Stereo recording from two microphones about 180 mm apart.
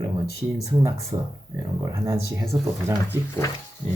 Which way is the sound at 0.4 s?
10° right (ahead or behind).